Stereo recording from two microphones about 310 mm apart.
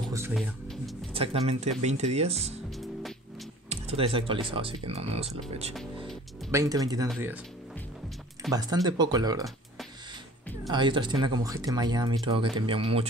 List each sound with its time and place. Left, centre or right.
0.1 s music: centre
1.1 s speech: centre
3.6 s speech: centre
8.5 s speech: centre
10.7 s speech: centre